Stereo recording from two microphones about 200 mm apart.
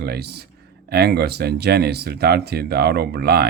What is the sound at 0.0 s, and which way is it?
Speech, 55° right (ahead or behind).